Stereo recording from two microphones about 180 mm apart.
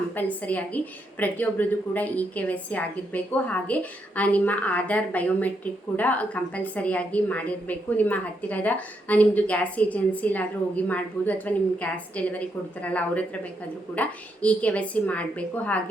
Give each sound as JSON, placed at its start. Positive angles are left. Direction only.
{"t": 0.2, "sound": "a woman's voice", "side_deg": 10}